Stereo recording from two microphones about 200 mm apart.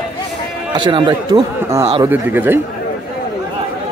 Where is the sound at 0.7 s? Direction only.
25° right (ahead or behind).